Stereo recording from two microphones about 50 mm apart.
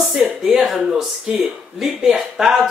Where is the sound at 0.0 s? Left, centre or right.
Centre.